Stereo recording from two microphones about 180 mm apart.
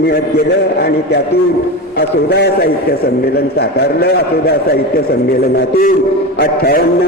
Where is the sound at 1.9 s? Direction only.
65° left (ahead or behind).